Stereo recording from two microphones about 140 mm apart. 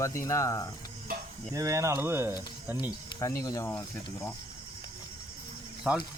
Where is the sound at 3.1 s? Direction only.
25° left (ahead or behind).